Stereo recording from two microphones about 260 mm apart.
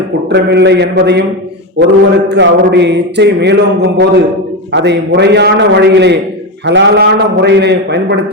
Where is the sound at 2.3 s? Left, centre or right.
Right.